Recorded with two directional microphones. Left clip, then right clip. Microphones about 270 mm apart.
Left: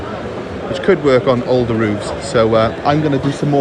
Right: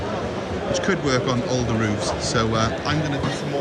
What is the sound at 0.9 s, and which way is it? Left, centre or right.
Speech, centre.